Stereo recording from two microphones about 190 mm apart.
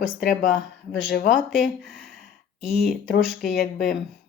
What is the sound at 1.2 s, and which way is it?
Speech, centre (ahead or behind).